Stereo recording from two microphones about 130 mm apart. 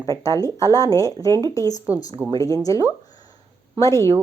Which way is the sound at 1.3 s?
35° right (ahead or behind).